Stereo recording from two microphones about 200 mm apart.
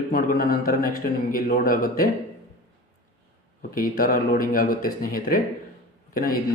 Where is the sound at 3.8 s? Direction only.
45° left (ahead or behind).